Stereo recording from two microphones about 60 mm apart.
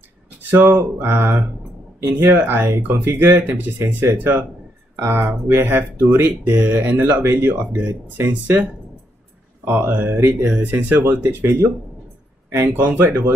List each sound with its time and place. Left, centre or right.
0.6 s speech: right
1.0 s speech: right
2.3 s speech: right
9.7 s speech: right
10.4 s speech: centre
10.7 s speech: right
11.4 s speech: right
12.4 s speech: right